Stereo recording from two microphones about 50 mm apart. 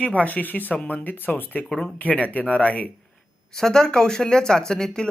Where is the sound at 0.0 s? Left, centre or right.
Left.